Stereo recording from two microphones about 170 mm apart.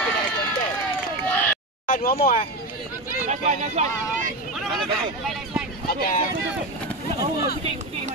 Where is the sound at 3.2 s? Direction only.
45° right (ahead or behind).